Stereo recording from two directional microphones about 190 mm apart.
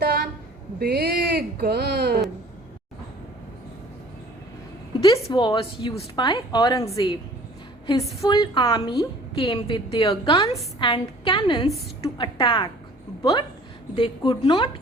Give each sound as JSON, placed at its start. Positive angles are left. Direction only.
{"t": 0.0, "sound": "a sound", "side_deg": -55}
{"t": 0.8, "sound": "speech", "side_deg": -55}
{"t": 5.0, "sound": "a woman's voice", "side_deg": 20}
{"t": 8.2, "sound": "a woman's voice", "side_deg": 20}
{"t": 13.9, "sound": "a woman's voice", "side_deg": 30}